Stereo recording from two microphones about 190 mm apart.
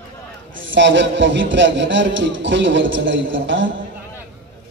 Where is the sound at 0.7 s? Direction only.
75° right (ahead or behind).